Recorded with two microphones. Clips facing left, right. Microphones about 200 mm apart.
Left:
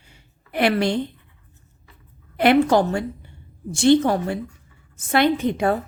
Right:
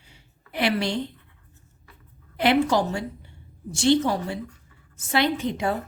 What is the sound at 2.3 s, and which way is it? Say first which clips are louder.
A woman's voice: left 5 dB; 55° left (ahead or behind).